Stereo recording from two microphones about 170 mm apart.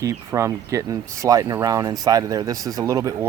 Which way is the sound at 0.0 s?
20° right (ahead or behind).